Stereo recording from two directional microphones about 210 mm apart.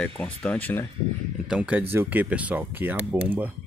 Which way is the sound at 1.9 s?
10° right (ahead or behind).